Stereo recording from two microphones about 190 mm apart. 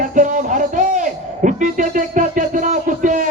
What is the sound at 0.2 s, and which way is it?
Music, 40° right (ahead or behind).